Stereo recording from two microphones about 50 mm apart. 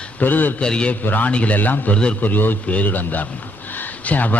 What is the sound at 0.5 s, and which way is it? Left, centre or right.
Speech, centre.